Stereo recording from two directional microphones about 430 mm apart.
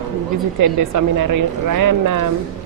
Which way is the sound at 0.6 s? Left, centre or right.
Right.